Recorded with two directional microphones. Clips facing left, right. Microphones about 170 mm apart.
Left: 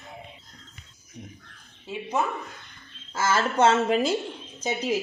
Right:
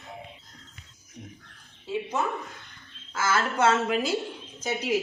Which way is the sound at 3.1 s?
35° left (ahead or behind).